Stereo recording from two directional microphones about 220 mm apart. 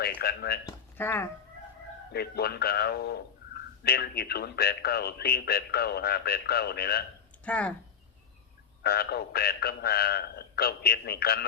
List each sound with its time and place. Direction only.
0.2 s speech: 45° left (ahead or behind)
0.9 s speech: 10° left (ahead or behind)
2.1 s speech: 45° left (ahead or behind)
7.4 s speech: 5° left (ahead or behind)
8.8 s speech: 45° left (ahead or behind)